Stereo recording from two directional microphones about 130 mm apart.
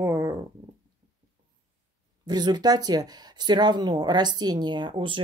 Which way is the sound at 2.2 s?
35° right (ahead or behind).